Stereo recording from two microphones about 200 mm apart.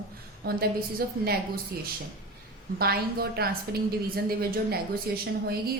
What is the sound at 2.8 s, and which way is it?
A woman's voice, 50° right (ahead or behind).